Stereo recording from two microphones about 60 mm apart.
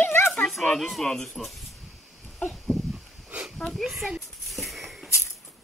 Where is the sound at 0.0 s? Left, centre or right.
Left.